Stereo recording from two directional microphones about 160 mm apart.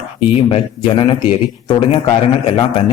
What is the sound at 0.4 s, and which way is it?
Speech, 35° left (ahead or behind).